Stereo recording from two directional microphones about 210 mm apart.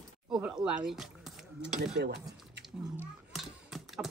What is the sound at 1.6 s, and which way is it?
Speech, 55° right (ahead or behind).